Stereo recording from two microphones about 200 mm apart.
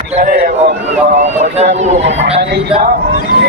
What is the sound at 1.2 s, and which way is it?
Speech, 35° right (ahead or behind).